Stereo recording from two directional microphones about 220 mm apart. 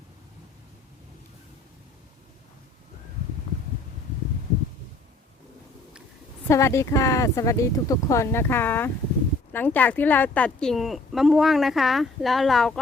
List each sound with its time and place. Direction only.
6.5 s a woman's voice: 15° left (ahead or behind)